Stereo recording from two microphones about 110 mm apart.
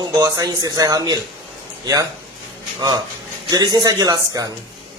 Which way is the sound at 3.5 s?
40° right (ahead or behind).